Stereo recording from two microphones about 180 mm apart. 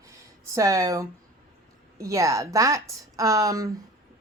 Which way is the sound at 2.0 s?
20° right (ahead or behind).